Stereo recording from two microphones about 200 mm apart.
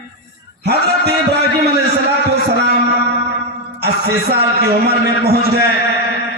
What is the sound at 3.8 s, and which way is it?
A man's voice, 50° right (ahead or behind).